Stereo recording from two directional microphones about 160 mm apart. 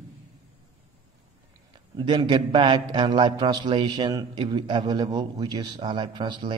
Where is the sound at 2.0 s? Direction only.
30° right (ahead or behind).